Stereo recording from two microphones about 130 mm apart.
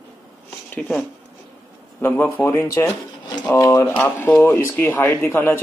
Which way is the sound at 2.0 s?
15° left (ahead or behind).